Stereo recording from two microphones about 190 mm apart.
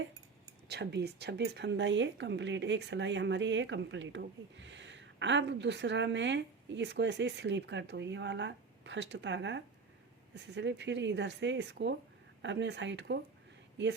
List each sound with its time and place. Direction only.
0.7 s speech: 60° right (ahead or behind)